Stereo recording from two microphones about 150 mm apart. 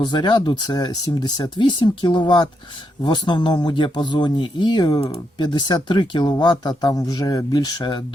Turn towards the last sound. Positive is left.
turn(degrees=25)  # may be behind; listen again after turning